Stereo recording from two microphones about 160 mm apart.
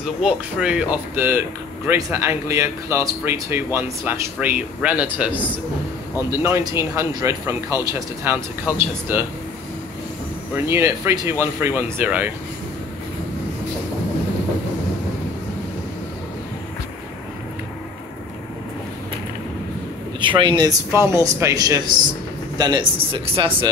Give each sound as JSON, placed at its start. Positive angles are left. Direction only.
{"t": 0.0, "sound": "speech", "side_deg": -5}
{"t": 6.3, "sound": "speech", "side_deg": -15}
{"t": 10.5, "sound": "speech", "side_deg": -15}
{"t": 20.2, "sound": "speech", "side_deg": -30}